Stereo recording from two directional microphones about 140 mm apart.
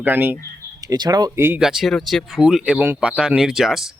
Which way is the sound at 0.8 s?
30° right (ahead or behind).